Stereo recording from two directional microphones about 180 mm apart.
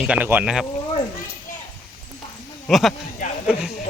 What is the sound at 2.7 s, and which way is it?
Speech, centre (ahead or behind).